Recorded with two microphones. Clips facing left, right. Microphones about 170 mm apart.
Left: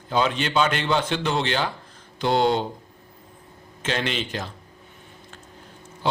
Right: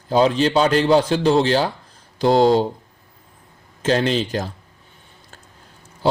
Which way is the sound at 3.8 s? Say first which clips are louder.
Right 8 dB; 35° right (ahead or behind).